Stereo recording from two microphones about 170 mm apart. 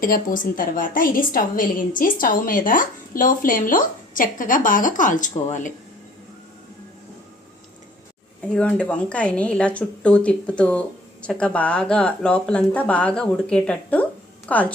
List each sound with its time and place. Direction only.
0.0 s a woman's voice: 55° left (ahead or behind)
8.4 s speech: 5° left (ahead or behind)